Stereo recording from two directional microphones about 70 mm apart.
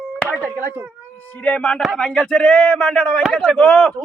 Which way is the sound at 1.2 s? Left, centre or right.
Centre.